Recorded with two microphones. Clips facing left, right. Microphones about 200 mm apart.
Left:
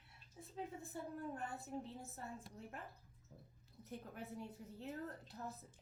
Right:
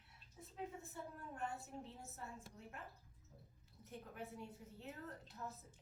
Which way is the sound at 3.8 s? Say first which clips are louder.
Left 2 dB; 40° left (ahead or behind).